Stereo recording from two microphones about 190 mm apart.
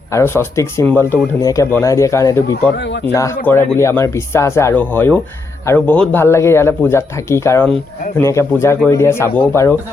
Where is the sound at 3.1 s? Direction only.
15° left (ahead or behind).